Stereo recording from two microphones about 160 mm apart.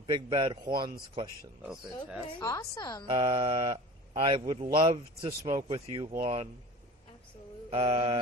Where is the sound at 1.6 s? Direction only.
5° right (ahead or behind).